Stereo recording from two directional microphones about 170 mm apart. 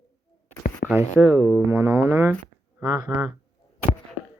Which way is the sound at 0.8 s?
80° left.